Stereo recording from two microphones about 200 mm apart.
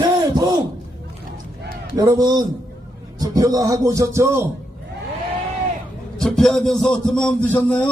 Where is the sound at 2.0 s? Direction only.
20° right (ahead or behind).